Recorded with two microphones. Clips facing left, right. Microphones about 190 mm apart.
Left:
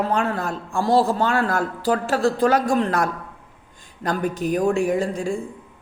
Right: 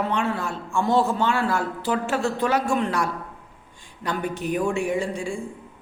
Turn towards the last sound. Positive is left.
turn(degrees=40)  # may be behind; listen again after turning